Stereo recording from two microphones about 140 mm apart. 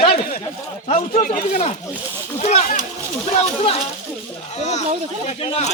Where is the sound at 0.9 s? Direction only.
65° left (ahead or behind).